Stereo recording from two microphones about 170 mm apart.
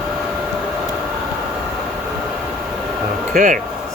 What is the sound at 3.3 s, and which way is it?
Speech, 50° right (ahead or behind).